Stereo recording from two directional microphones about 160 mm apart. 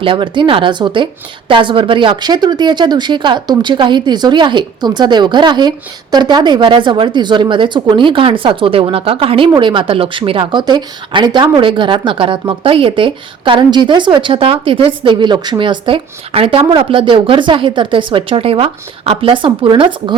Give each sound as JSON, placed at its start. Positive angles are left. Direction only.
{"t": 0.0, "sound": "a woman's voice", "side_deg": -30}